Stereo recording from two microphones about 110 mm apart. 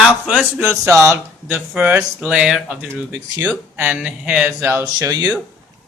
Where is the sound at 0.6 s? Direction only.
25° right (ahead or behind); by 2.9 s 5° right (ahead or behind).